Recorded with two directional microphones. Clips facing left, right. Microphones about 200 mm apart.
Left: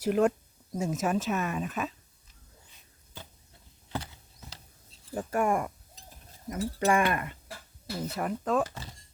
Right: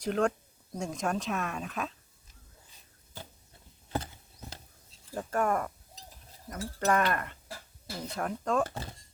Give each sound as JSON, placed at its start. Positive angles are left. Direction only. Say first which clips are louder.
{"t": 0.0, "sound": "speech", "louder": "left 4 dB", "side_deg": 5}
{"t": 3.8, "sound": "a sound", "louder": "right 2 dB", "side_deg": -50}
{"t": 5.1, "sound": "speech", "louder": "left 2 dB", "side_deg": 10}
{"t": 8.6, "sound": "speech", "louder": "right 2 dB", "side_deg": -55}